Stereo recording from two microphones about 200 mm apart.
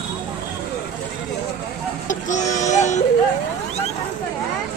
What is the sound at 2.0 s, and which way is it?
Vehicle, 35° left (ahead or behind).